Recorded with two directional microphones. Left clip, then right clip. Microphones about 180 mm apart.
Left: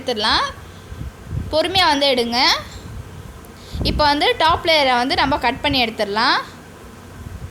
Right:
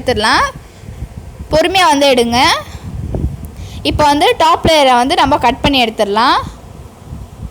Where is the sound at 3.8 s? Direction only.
50° right (ahead or behind).